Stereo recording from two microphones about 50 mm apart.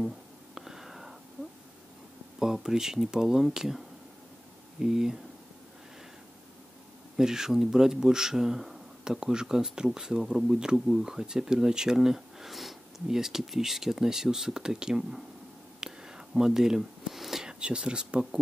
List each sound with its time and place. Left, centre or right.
0.6 s whispering: centre
2.3 s speech: centre
7.2 s speech: centre
15.8 s a sound: centre
17.5 s speech: centre